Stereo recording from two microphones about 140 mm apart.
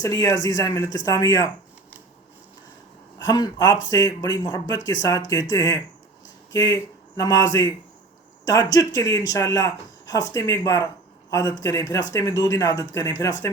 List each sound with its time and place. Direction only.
0.0 s speech: 25° left (ahead or behind)
3.2 s speech: 30° left (ahead or behind)